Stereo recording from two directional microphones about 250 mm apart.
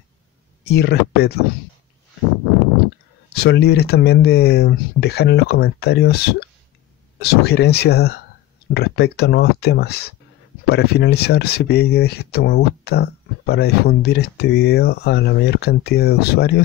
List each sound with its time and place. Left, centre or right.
0.7 s speech: left
3.3 s speech: left
7.2 s speech: left